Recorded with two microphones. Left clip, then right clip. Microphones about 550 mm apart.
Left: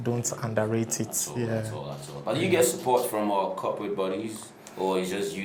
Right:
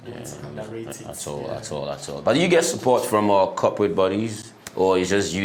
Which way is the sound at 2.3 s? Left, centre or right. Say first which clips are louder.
Right 6 dB; right.